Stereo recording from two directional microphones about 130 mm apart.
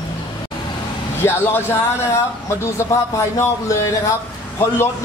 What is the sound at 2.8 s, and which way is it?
A man's voice, 25° left (ahead or behind).